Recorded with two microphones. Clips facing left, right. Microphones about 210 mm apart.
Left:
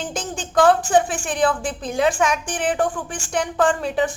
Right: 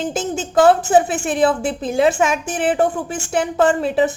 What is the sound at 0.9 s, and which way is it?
A woman's voice, 5° right (ahead or behind).